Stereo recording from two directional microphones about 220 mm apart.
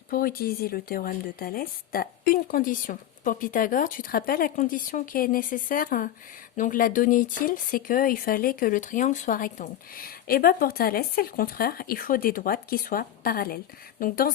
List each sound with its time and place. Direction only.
0.1 s speech: 40° left (ahead or behind)